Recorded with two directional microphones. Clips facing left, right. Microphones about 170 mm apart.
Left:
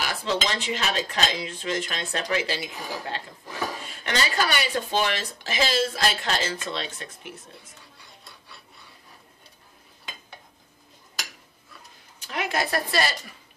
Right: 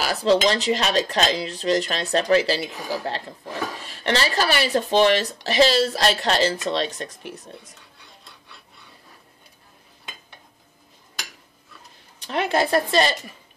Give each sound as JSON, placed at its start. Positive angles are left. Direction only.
{"t": 0.0, "sound": "speech", "side_deg": -35}
{"t": 12.3, "sound": "a woman's voice", "side_deg": -30}